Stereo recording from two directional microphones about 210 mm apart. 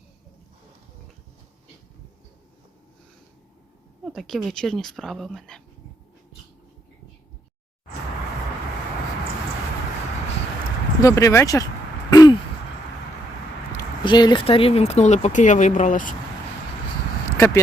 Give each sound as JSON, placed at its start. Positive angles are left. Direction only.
{"t": 4.0, "sound": "speech", "side_deg": 0}
{"t": 11.0, "sound": "speech", "side_deg": 15}
{"t": 12.1, "sound": "a sound", "side_deg": 20}
{"t": 14.0, "sound": "speech", "side_deg": 20}
{"t": 17.3, "sound": "speech", "side_deg": 15}